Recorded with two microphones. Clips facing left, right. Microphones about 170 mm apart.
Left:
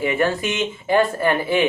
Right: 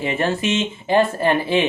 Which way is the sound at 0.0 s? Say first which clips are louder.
Left 1 dB; 25° right (ahead or behind).